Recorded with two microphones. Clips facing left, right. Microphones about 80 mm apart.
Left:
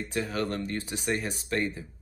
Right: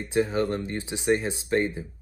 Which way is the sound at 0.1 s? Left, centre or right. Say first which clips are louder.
Right 7 dB; right.